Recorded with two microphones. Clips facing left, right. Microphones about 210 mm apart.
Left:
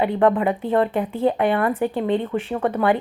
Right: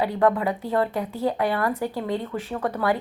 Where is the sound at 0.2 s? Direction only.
25° left (ahead or behind).